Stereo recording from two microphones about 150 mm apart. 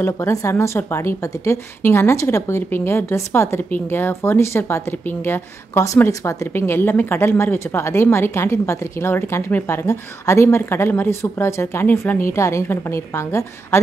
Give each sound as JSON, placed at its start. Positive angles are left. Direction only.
{"t": 0.0, "sound": "a woman's voice", "side_deg": 20}